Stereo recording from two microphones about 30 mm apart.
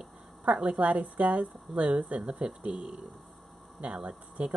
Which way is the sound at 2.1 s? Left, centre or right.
Right.